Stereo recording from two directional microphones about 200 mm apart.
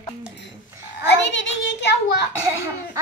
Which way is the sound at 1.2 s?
60° left (ahead or behind).